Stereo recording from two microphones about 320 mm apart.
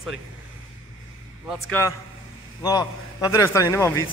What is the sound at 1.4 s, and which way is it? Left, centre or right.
A man's voice, centre.